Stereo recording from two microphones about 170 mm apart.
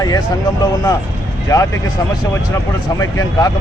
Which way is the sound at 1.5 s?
20° left (ahead or behind).